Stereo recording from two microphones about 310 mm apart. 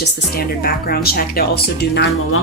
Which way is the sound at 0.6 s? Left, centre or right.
Left.